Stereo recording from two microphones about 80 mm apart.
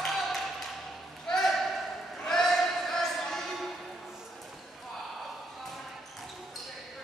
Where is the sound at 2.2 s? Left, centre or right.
Centre.